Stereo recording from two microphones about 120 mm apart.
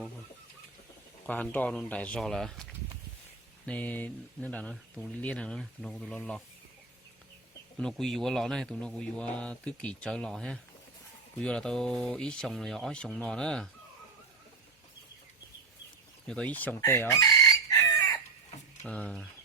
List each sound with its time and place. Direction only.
1.3 s speech: 15° left (ahead or behind)
3.7 s speech: 15° left (ahead or behind)
7.8 s a man's voice: 5° left (ahead or behind)
16.2 s chicken: 5° left (ahead or behind); by 18.2 s 25° left (ahead or behind)
18.9 s speech: 10° left (ahead or behind)